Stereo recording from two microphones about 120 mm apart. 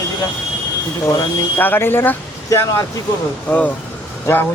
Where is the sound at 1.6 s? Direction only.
15° left (ahead or behind).